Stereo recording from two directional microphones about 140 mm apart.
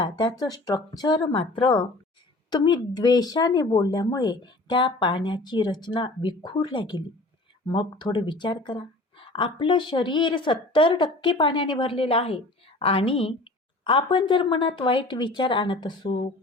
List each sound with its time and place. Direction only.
0.0 s speech: 30° left (ahead or behind)